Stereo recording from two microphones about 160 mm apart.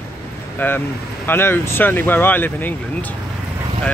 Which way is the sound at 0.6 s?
15° left (ahead or behind).